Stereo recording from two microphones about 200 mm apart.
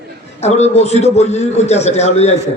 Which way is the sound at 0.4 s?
35° left (ahead or behind).